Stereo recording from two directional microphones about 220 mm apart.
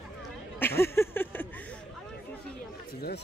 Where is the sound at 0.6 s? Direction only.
10° left (ahead or behind).